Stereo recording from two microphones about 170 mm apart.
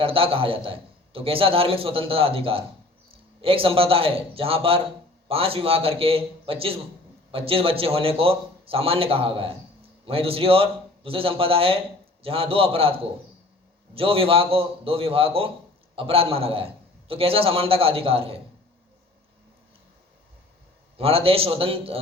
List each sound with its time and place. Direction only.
0.0 s a man's voice: 35° right (ahead or behind)
13.9 s a man's voice: 35° right (ahead or behind)
21.0 s a man's voice: 35° right (ahead or behind)